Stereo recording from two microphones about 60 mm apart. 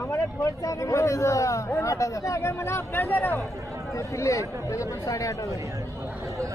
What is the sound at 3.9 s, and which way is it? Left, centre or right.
A man's voice, left.